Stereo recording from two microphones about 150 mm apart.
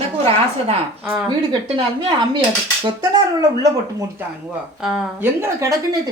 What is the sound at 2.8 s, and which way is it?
Speech, 30° right (ahead or behind).